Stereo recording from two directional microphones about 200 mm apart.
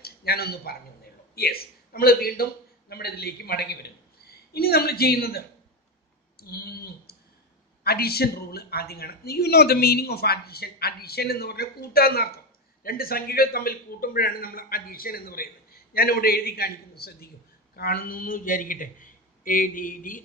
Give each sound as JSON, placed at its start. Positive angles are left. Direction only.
{"t": 0.0, "sound": "a man's voice", "side_deg": 50}
{"t": 6.4, "sound": "a man's voice", "side_deg": 50}